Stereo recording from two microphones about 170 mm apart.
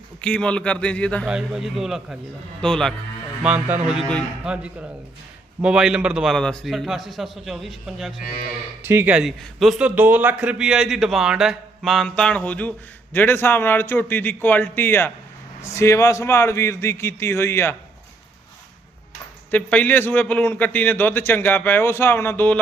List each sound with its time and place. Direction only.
0.2 s a man's voice: 5° left (ahead or behind)
1.3 s a man's voice: 5° right (ahead or behind)
3.4 s a man's voice: 5° right (ahead or behind)
8.8 s a man's voice: 15° right (ahead or behind); by 17.7 s 15° left (ahead or behind)
19.5 s a man's voice: 10° left (ahead or behind)